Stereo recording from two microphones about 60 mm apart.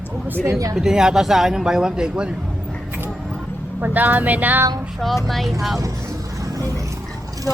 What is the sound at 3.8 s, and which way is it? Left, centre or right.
Speech, right.